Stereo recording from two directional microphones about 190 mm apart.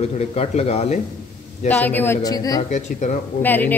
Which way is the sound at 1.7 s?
10° left (ahead or behind).